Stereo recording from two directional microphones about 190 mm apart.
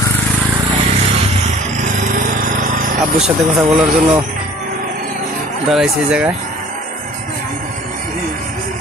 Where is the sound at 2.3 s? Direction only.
45° right (ahead or behind).